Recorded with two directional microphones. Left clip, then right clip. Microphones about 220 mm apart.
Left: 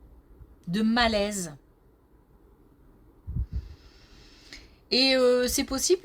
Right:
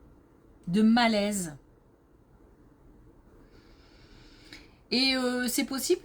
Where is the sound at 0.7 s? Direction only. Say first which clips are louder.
Even; 30° left (ahead or behind).